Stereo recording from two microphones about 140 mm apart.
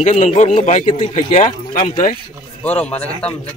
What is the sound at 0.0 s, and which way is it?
Speech, 55° left (ahead or behind).